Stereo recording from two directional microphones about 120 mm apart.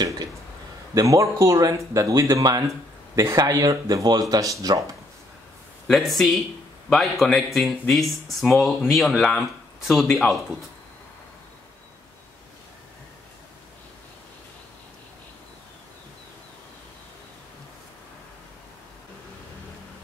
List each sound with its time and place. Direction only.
0.9 s speech: 25° right (ahead or behind)
5.9 s speech: centre (ahead or behind)